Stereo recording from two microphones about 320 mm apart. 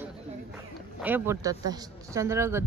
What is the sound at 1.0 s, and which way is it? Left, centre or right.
Speech, centre.